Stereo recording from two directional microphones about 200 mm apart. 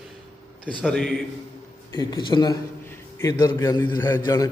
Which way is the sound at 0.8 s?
Centre (ahead or behind).